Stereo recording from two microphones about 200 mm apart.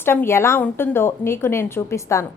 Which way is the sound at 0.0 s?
10° left (ahead or behind).